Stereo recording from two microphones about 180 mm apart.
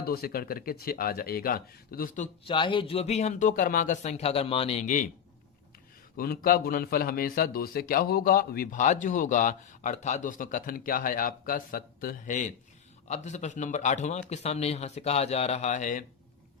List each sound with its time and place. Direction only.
0.0 s speech: 55° left (ahead or behind)
2.5 s a man's voice: 25° left (ahead or behind)
6.1 s a man's voice: 55° left (ahead or behind)